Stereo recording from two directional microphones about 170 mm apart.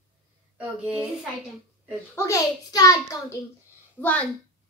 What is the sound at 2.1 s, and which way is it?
A child's voice, 20° left (ahead or behind).